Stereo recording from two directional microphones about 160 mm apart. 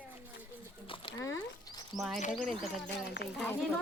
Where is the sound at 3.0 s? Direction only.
90° left.